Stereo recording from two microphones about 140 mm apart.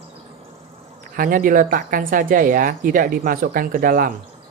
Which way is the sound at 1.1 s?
85° right.